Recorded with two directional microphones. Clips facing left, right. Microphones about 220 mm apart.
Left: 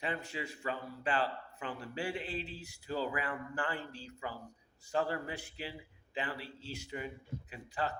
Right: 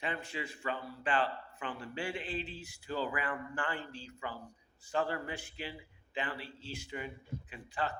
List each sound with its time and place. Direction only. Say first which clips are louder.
0.0 s speech: even; 40° left (ahead or behind)